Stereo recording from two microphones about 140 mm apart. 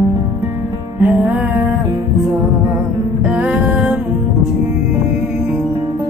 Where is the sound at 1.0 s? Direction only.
15° right (ahead or behind).